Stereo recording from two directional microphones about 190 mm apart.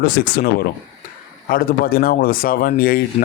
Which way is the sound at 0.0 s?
50° left (ahead or behind).